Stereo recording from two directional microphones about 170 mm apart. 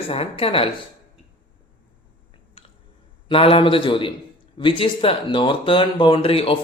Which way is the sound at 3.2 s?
30° left (ahead or behind).